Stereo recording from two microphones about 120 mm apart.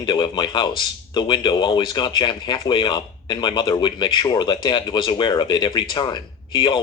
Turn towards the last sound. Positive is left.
turn(degrees=40)  # may be behind; listen again after turning